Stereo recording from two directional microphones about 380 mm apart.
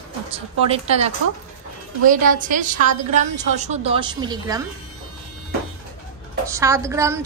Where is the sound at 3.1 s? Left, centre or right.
Centre.